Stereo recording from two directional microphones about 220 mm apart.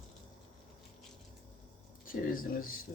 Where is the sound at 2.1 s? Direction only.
40° left (ahead or behind).